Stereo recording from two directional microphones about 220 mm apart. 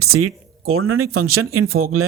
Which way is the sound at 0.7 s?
70° right (ahead or behind).